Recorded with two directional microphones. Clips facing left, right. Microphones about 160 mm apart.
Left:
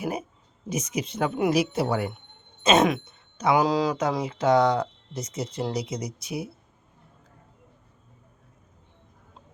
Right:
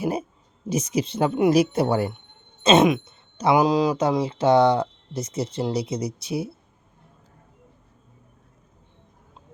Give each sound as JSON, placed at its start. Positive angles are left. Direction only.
{"t": 0.0, "sound": "a sound", "side_deg": -30}
{"t": 0.7, "sound": "speech", "side_deg": -30}
{"t": 1.7, "sound": "speech", "side_deg": -40}
{"t": 2.6, "sound": "speech", "side_deg": -20}